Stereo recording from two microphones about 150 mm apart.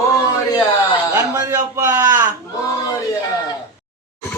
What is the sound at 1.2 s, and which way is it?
Speech, 25° right (ahead or behind).